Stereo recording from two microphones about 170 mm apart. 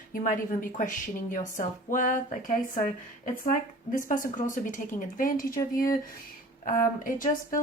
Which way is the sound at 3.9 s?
50° left (ahead or behind).